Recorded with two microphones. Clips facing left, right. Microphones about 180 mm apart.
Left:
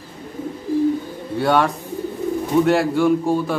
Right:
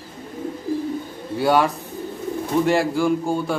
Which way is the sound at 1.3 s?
Centre (ahead or behind).